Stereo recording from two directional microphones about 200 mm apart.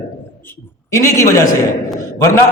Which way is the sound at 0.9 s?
15° left (ahead or behind).